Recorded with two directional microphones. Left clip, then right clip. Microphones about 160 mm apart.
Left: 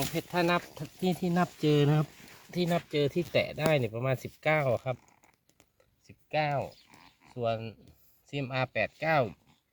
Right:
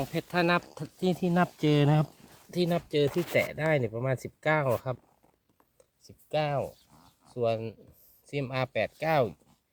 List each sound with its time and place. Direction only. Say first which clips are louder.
0.0 s speech: right 1 dB; 15° right (ahead or behind)
2.5 s speech: right 2 dB; 10° right (ahead or behind)
3.3 s speech: even; 10° left (ahead or behind); by 4.6 s 5° right (ahead or behind)
4.6 s speech: right 1 dB; 20° right (ahead or behind)
6.3 s speech: right 1 dB; 35° right (ahead or behind)